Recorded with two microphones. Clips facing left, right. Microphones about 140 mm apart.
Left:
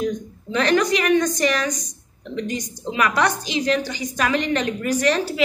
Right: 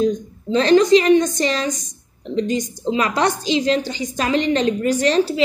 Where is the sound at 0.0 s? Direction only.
30° right (ahead or behind).